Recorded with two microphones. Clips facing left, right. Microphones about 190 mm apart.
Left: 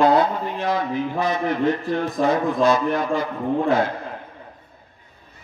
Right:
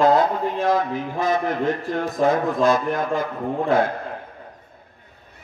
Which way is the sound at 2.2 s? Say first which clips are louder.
Right 1 dB; 50° right (ahead or behind).